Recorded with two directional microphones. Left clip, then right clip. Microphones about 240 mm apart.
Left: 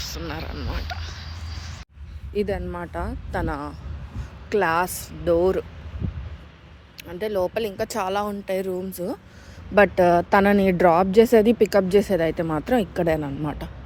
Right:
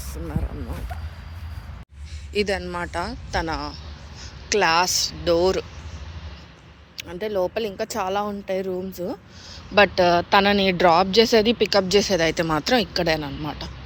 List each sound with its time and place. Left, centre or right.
2.3 s speech: centre
7.1 s speech: left
12.2 s speech: centre